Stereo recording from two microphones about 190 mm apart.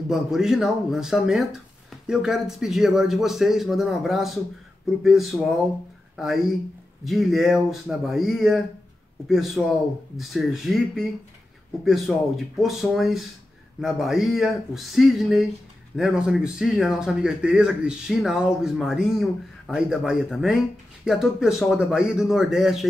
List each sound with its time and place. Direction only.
0.1 s speech: centre (ahead or behind)